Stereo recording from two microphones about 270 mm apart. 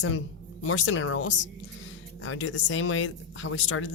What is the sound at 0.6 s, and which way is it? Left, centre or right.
Speech, left.